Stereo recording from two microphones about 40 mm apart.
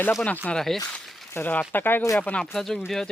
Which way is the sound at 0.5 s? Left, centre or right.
Centre.